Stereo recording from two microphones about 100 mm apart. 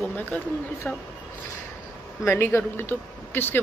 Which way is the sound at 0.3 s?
20° left (ahead or behind).